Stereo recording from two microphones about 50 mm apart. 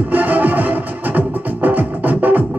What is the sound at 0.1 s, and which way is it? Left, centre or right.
Music, right.